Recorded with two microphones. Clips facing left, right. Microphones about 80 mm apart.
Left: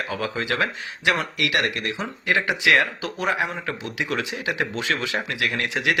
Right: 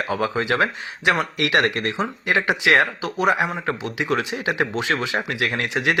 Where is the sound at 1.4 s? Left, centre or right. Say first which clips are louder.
Right 4 dB; right.